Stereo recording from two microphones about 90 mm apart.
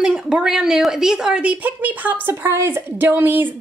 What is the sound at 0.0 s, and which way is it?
A woman's voice, 10° right (ahead or behind).